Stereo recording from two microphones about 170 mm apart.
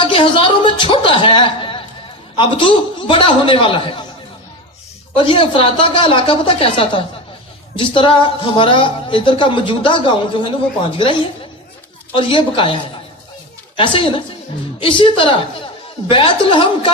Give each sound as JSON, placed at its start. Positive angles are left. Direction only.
{"t": 0.0, "sound": "speech", "side_deg": 30}
{"t": 5.1, "sound": "speech", "side_deg": 30}